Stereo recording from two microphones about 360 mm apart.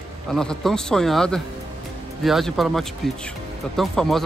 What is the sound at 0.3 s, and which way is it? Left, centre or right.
Speech, centre.